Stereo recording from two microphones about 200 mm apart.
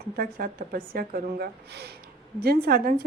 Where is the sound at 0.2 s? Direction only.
45° right (ahead or behind).